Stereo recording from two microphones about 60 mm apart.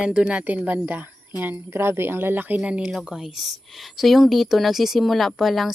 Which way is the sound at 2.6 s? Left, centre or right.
Centre.